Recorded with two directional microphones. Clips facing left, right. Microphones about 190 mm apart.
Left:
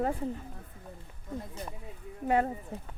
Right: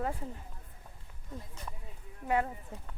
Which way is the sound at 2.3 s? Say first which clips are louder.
Left 3 dB; 35° left (ahead or behind).